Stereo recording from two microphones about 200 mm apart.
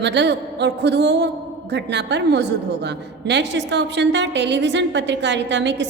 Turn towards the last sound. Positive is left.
turn(degrees=-60)  # may be behind; listen again after turning